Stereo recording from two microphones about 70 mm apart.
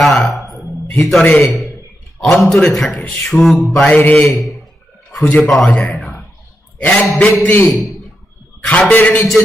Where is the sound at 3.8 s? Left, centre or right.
Left.